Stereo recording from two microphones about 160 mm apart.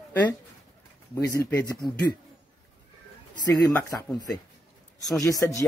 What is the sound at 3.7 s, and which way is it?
Speech, 15° left (ahead or behind).